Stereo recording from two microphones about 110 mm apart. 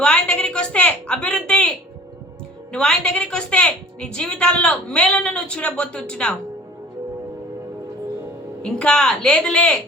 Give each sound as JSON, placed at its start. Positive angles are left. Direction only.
{"t": 0.0, "sound": "a woman's voice", "side_deg": 10}
{"t": 2.7, "sound": "a woman's voice", "side_deg": 10}
{"t": 8.6, "sound": "a woman's voice", "side_deg": 10}